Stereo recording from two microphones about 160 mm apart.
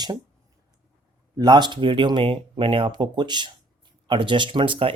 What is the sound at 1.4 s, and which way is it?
Speech, 25° right (ahead or behind).